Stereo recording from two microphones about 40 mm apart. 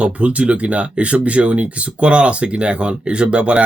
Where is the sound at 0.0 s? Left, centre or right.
Right.